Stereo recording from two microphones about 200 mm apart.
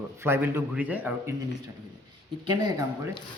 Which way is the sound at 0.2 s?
10° right (ahead or behind).